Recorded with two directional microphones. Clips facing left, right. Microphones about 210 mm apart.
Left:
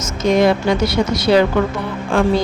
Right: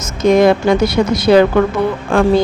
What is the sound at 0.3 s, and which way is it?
A woman's voice, 55° right (ahead or behind).